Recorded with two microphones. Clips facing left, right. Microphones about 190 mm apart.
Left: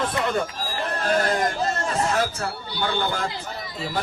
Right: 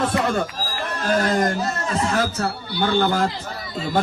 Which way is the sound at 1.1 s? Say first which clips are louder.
Right 3 dB; 45° right (ahead or behind).